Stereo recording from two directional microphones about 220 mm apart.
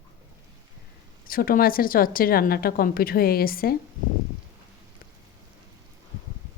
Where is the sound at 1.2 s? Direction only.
40° left (ahead or behind).